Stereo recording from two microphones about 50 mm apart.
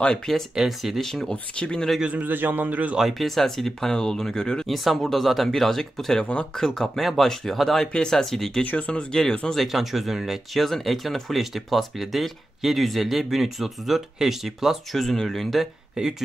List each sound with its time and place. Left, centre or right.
0.6 s speech: centre
1.0 s speech: centre
1.3 s speech: centre
2.1 s a man's voice: right
3.0 s speech: centre
4.6 s speech: centre
7.0 s speech: centre
8.6 s speech: left
9.6 s speech: centre
16.0 s speech: centre